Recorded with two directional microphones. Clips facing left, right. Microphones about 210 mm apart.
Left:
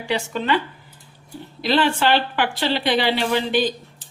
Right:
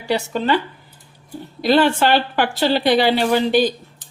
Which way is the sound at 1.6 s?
45° right (ahead or behind).